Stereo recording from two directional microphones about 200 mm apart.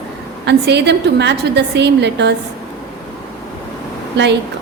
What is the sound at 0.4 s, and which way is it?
A woman's voice, 55° right (ahead or behind).